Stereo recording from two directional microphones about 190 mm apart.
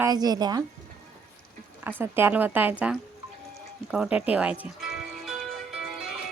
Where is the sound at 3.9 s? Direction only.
5° right (ahead or behind).